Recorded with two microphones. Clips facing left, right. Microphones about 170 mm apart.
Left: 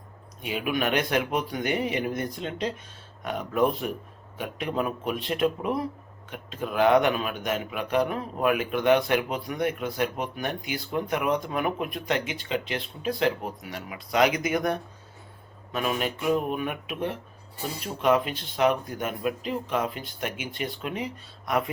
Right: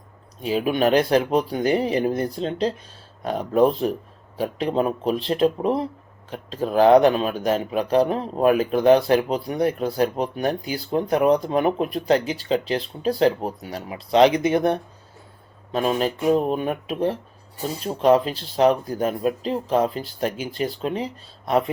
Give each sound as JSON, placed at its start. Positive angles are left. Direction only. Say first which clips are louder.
{"t": 0.4, "sound": "speech", "louder": "right 7 dB", "side_deg": -35}